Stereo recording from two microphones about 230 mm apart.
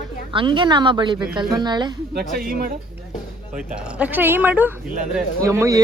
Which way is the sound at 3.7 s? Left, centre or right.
Centre.